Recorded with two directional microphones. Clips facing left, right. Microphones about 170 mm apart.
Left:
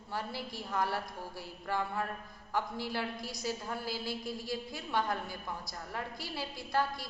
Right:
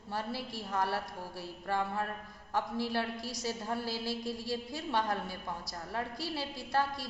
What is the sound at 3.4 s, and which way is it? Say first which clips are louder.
A woman's voice: right 1 dB; 30° right (ahead or behind).